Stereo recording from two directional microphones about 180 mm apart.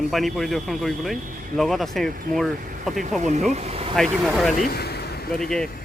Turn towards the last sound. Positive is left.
turn(degrees=0)  # may be behind; listen again after turning